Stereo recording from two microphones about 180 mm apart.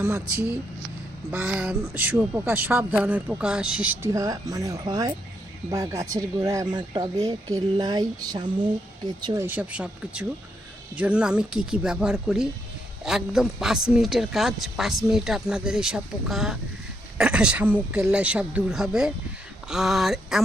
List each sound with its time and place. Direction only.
0.0 s speech: 10° right (ahead or behind)